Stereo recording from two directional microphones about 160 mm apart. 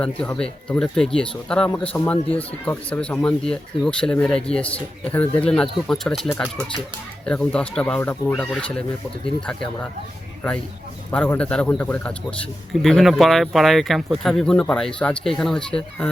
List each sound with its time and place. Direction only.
0.0 s speech: 10° left (ahead or behind)
11.1 s speech: 10° left (ahead or behind)